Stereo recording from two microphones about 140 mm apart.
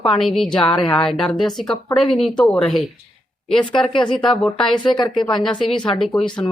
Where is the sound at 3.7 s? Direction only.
35° left (ahead or behind).